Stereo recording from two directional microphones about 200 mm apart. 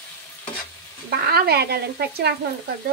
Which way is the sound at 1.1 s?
50° right (ahead or behind).